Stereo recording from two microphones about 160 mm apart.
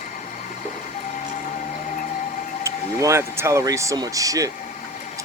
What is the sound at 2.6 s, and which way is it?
Speech, 20° right (ahead or behind).